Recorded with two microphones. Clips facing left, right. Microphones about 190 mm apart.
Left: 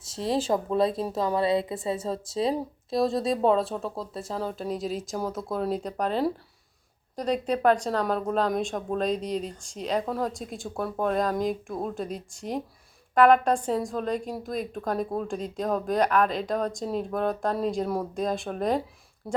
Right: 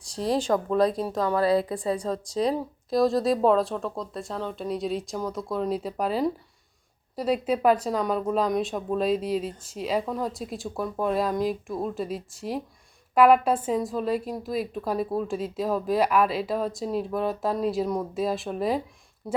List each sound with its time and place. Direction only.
0.2 s a woman's voice: 5° left (ahead or behind)
1.4 s a woman's voice: 25° left (ahead or behind)
1.7 s a woman's voice: centre (ahead or behind)